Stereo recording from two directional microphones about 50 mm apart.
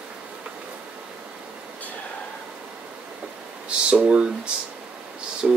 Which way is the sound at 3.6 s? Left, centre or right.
Right.